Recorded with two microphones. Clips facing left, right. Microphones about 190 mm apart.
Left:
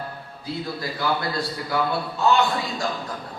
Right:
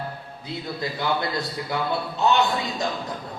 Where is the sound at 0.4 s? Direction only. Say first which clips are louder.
Left 1 dB; 20° right (ahead or behind).